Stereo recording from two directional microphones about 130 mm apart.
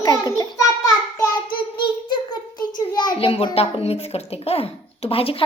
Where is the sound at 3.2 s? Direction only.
45° left (ahead or behind).